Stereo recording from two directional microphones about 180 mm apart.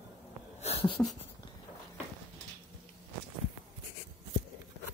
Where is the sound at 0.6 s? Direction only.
35° left (ahead or behind).